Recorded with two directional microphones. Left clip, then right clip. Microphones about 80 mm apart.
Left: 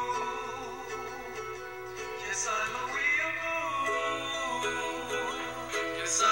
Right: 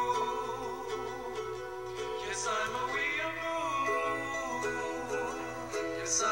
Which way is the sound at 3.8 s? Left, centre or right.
Centre.